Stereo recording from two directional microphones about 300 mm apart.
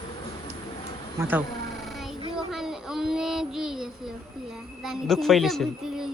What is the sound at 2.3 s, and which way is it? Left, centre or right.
Child singing, centre.